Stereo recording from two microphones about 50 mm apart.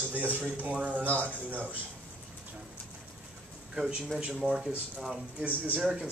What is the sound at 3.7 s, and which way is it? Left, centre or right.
Speech, centre.